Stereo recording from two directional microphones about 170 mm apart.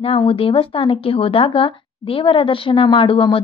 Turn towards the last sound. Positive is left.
turn(degrees=30)  # may be behind; listen again after turning